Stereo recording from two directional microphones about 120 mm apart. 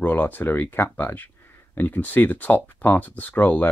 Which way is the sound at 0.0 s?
15° left (ahead or behind).